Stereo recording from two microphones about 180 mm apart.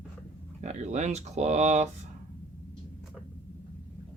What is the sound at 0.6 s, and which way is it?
Speech, 40° right (ahead or behind).